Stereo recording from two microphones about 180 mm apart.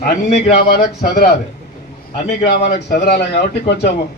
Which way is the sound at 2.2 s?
65° left (ahead or behind).